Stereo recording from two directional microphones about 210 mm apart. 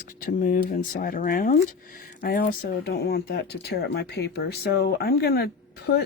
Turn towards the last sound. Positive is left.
turn(degrees=50)  # may be behind; listen again after turning